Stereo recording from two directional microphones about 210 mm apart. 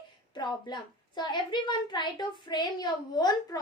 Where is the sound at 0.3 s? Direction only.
20° left (ahead or behind).